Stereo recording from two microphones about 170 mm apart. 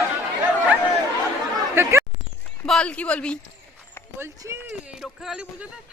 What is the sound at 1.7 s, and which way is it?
Speech, 15° right (ahead or behind).